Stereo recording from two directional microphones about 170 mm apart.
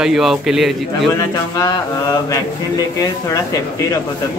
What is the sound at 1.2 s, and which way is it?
Speech, 20° left (ahead or behind).